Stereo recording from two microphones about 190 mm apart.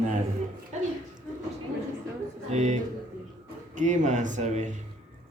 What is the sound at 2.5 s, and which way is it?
Speech, 40° right (ahead or behind).